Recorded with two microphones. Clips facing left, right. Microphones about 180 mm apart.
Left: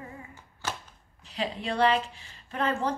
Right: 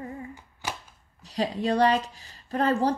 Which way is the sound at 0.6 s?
10° right (ahead or behind).